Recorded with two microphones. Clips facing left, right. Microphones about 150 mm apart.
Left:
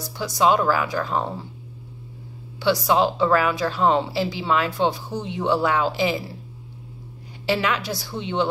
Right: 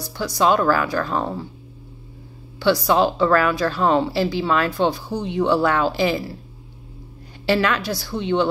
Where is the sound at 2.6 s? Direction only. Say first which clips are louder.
Right 2 dB; 20° left (ahead or behind).